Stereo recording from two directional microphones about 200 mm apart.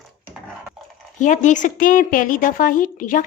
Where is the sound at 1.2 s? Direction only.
40° left (ahead or behind).